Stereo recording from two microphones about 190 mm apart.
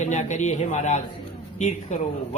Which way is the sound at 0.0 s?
40° left (ahead or behind).